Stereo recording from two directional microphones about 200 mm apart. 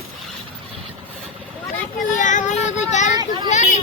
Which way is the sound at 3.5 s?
35° left (ahead or behind).